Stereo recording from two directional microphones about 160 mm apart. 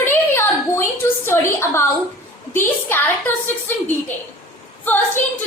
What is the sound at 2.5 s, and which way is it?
A woman's voice, 10° left (ahead or behind).